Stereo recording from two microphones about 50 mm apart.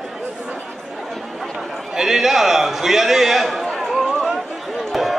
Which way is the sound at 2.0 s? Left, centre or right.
Centre.